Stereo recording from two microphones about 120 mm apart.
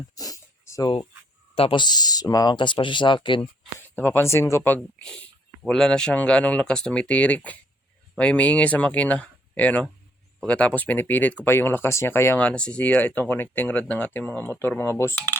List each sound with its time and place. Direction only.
0.2 s a sound: 25° left (ahead or behind)
1.5 s a man's voice: 55° left (ahead or behind)
1.8 s speech: 35° left (ahead or behind)
3.8 s speech: 15° left (ahead or behind)
12.5 s speech: 10° left (ahead or behind)